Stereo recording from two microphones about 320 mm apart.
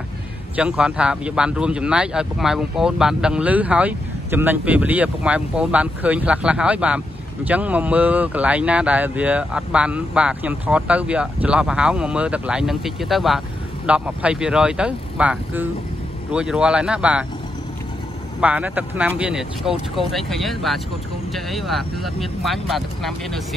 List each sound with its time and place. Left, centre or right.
0.6 s a man's voice: centre
18.4 s a man's voice: centre